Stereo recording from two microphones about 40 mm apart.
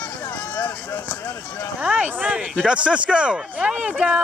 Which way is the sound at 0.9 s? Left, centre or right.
Left.